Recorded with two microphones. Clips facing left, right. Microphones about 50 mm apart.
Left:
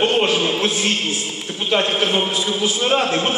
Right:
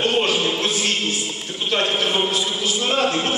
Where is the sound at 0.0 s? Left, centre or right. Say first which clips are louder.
Left 2 dB; centre.